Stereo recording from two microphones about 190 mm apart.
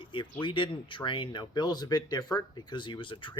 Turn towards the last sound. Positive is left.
turn(degrees=25)  # may be behind; listen again after turning